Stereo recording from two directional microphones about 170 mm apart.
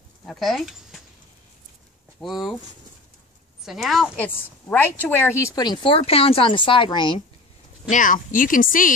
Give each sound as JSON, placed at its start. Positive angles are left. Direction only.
{"t": 0.3, "sound": "speech", "side_deg": 0}
{"t": 2.1, "sound": "speech", "side_deg": 0}
{"t": 3.6, "sound": "a woman's voice", "side_deg": 0}
{"t": 7.9, "sound": "speech", "side_deg": 50}